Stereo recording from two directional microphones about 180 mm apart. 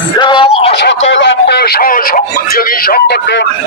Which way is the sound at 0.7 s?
80° left.